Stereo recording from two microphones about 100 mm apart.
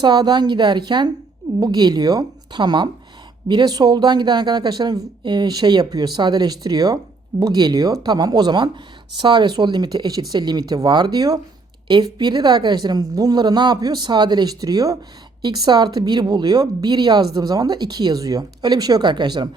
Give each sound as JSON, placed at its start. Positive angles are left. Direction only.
{"t": 0.0, "sound": "speech", "side_deg": -45}